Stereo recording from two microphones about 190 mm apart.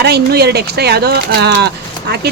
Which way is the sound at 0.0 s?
60° right (ahead or behind).